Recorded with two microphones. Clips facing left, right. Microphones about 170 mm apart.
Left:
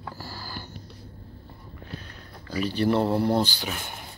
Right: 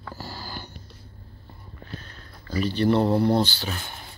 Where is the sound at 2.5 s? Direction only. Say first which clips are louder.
Right 2 dB; 10° left (ahead or behind).